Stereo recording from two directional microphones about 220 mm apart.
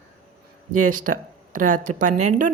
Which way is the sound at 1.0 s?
35° right (ahead or behind).